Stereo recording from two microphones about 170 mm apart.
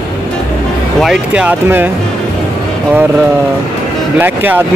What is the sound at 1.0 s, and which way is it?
Speech, 5° right (ahead or behind).